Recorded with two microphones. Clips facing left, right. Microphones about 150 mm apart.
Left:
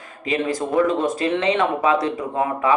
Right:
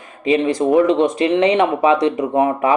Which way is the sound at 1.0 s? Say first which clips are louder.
Right 6 dB; 20° right (ahead or behind).